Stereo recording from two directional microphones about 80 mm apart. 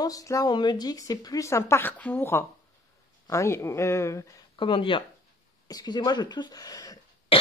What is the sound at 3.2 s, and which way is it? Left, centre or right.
Speech, left.